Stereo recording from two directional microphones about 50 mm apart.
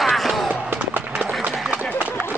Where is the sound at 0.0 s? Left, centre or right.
Centre.